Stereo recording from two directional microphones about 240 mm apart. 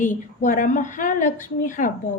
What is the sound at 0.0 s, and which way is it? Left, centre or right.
A woman's voice, left.